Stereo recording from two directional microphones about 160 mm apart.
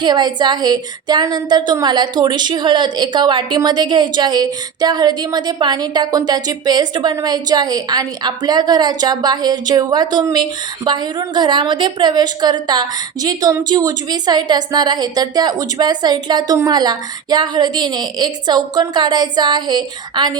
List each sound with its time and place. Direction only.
0.0 s a woman's voice: 25° right (ahead or behind)